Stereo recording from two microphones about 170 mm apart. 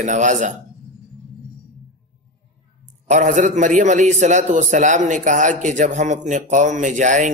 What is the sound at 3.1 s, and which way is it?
A man's voice, 45° right (ahead or behind).